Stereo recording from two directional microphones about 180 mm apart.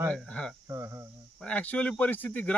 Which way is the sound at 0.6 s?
15° right (ahead or behind).